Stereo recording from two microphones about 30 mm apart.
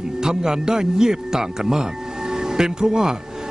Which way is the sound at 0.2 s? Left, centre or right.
Right.